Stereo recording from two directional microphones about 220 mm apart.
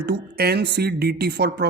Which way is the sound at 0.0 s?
45° right (ahead or behind).